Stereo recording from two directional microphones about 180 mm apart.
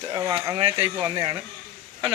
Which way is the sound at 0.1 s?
25° right (ahead or behind).